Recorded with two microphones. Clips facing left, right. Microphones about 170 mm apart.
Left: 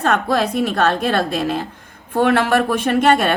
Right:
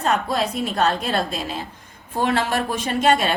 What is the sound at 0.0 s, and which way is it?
A woman's voice, 70° left (ahead or behind).